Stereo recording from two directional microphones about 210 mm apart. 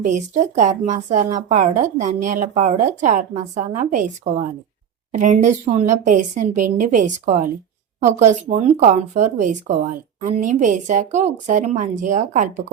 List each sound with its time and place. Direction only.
0.0 s speech: 40° right (ahead or behind)